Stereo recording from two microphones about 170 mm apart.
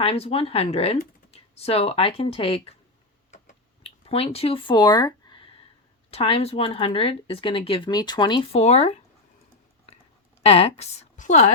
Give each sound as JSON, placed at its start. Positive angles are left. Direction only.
{"t": 0.0, "sound": "speech", "side_deg": 35}
{"t": 3.3, "sound": "typing", "side_deg": 40}
{"t": 6.1, "sound": "speech", "side_deg": 35}
{"t": 10.4, "sound": "speech", "side_deg": 35}